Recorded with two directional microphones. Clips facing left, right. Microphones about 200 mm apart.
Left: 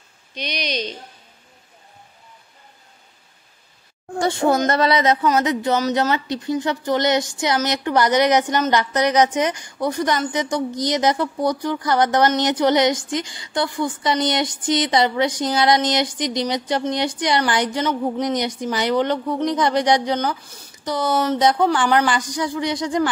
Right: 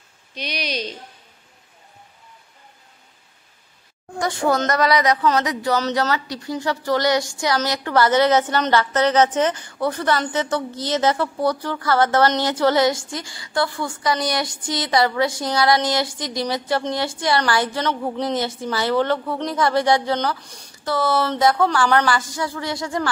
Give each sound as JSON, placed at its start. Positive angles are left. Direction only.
{"t": 0.3, "sound": "a woman's voice", "side_deg": -5}
{"t": 4.2, "sound": "a woman's voice", "side_deg": 25}